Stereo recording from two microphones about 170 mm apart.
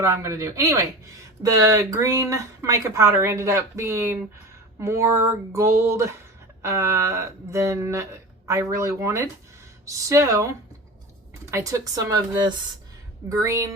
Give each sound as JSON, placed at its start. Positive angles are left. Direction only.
{"t": 0.0, "sound": "speech", "side_deg": -15}
{"t": 11.5, "sound": "speech", "side_deg": -20}